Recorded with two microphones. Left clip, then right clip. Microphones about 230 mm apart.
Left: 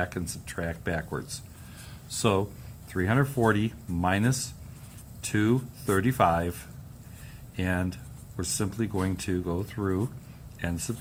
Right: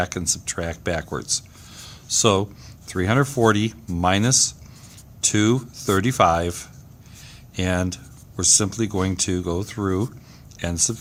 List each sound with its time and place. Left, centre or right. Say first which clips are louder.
0.0 s speech: right 8 dB; right